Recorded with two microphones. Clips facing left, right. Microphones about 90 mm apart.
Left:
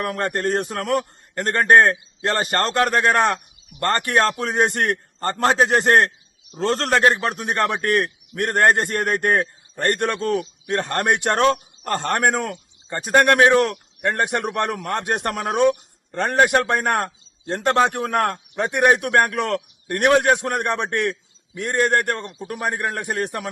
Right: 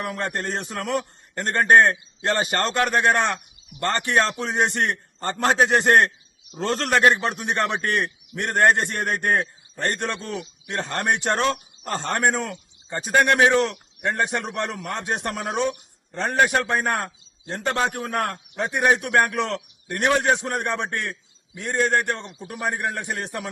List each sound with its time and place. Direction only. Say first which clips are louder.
0.0 s a man's voice: left 5 dB; 50° left (ahead or behind)
5.4 s a man's voice: left 1 dB; centre (ahead or behind)
6.6 s a man's voice: left 2 dB; 35° left (ahead or behind); by 23.4 s 55° left (ahead or behind)